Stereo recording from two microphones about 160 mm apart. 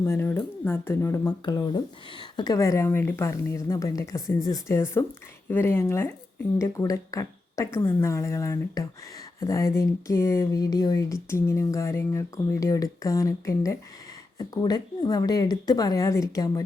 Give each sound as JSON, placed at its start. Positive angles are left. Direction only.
{"t": 0.0, "sound": "speech", "side_deg": 15}